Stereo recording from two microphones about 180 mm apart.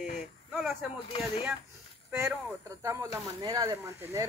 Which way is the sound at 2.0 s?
15° right (ahead or behind).